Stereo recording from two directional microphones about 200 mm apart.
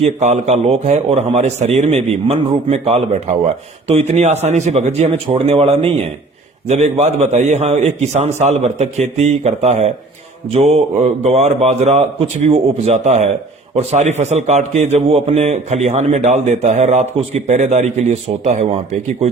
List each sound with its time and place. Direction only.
0.0 s a man's voice: 35° right (ahead or behind)